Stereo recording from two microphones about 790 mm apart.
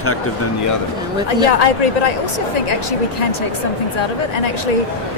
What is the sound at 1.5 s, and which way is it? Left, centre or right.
Speech, left.